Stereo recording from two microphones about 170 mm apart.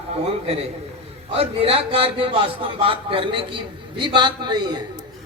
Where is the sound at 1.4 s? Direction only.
35° right (ahead or behind).